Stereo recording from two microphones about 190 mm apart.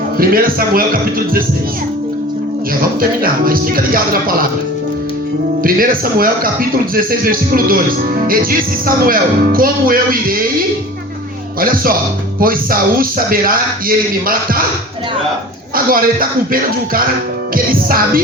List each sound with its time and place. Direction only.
0.2 s a man's voice: 50° right (ahead or behind)
3.0 s a man's voice: 50° right (ahead or behind)
5.6 s a man's voice: 50° right (ahead or behind)
11.6 s a man's voice: 50° right (ahead or behind)
15.7 s a man's voice: 50° right (ahead or behind)
17.5 s a man's voice: 50° right (ahead or behind)